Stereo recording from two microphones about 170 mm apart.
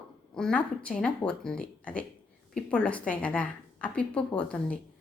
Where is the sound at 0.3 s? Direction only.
5° left (ahead or behind).